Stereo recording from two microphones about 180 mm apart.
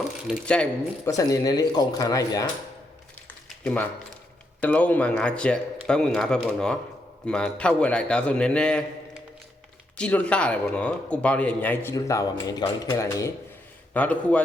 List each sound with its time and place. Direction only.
0.3 s a man's voice: 5° left (ahead or behind)
1.1 s speech: 20° left (ahead or behind)
3.6 s a man's voice: 5° left (ahead or behind)
10.0 s speech: 5° left (ahead or behind)